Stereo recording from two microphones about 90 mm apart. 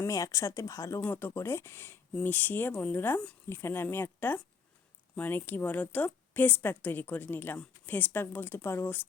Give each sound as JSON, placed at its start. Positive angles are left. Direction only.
{"t": 0.1, "sound": "speech", "side_deg": 35}
{"t": 1.0, "sound": "a woman's voice", "side_deg": 25}